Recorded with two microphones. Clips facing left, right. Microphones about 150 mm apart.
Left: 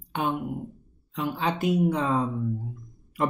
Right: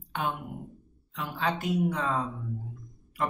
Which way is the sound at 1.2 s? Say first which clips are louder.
Left 4 dB; 20° left (ahead or behind).